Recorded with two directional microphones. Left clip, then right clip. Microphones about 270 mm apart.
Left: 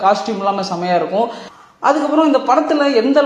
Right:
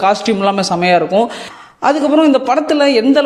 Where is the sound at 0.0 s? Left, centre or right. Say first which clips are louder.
Right 2 dB; right.